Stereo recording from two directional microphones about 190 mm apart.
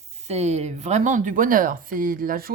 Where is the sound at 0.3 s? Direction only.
35° right (ahead or behind).